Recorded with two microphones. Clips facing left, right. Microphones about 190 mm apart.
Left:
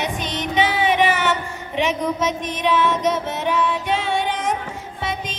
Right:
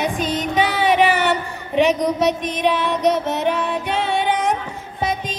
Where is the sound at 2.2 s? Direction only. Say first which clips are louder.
Right 4 dB; 60° right (ahead or behind).